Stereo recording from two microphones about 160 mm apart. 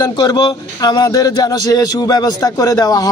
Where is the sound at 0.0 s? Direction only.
25° left (ahead or behind).